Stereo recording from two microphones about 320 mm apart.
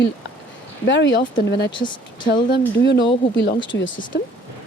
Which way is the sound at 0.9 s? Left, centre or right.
Left.